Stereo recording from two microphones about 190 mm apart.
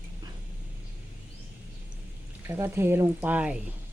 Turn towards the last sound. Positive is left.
turn(degrees=-5)  # may be behind; listen again after turning